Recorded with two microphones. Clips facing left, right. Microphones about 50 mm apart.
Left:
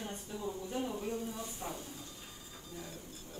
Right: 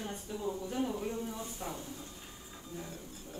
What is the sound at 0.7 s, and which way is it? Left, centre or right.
Speech, right.